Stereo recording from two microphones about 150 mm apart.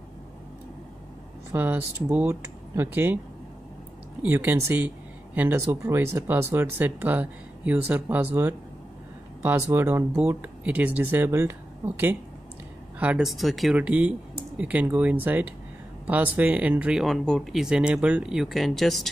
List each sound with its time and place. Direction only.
1.5 s speech: 15° right (ahead or behind)
4.2 s speech: 15° right (ahead or behind)
9.4 s speech: 15° right (ahead or behind); by 19.0 s centre (ahead or behind)